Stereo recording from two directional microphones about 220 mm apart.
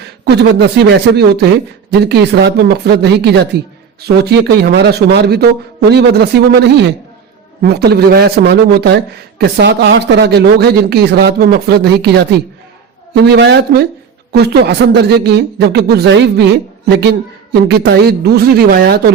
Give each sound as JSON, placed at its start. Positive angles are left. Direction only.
{"t": 0.0, "sound": "speech", "side_deg": -50}